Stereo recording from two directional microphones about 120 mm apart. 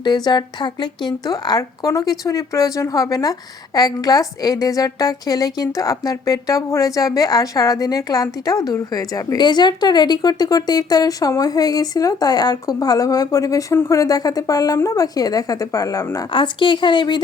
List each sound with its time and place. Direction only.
0.0 s a woman's voice: 35° left (ahead or behind)
16.3 s a woman's voice: 45° left (ahead or behind)